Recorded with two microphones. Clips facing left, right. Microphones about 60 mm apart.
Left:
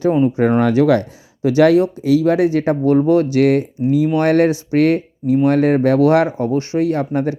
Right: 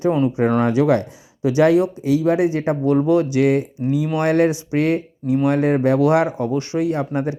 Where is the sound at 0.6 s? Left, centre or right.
Left.